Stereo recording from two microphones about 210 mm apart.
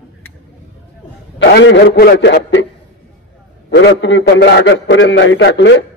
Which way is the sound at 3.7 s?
60° left (ahead or behind).